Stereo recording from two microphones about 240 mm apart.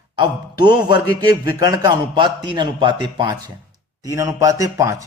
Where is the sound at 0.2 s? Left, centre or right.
Centre.